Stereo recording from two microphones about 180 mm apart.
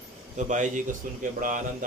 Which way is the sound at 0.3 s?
45° right (ahead or behind).